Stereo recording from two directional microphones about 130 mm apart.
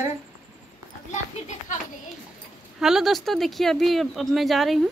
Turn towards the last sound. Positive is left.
turn(degrees=0)  # may be behind; listen again after turning